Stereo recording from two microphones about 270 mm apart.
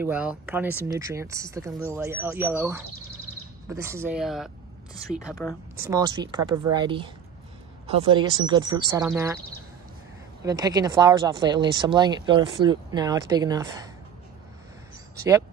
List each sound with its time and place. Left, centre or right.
0.0 s speech: centre
5.9 s speech: centre
10.4 s speech: centre